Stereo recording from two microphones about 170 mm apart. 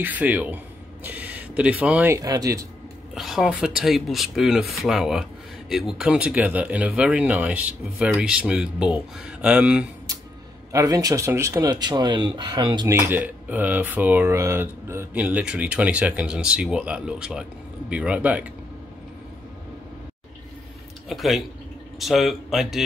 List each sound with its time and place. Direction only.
0.0 s speech: 10° right (ahead or behind)
3.2 s speech: centre (ahead or behind)
10.1 s a sound: 20° right (ahead or behind)
10.7 s speech: 20° right (ahead or behind)
13.0 s speech: 10° right (ahead or behind)
21.1 s speech: centre (ahead or behind)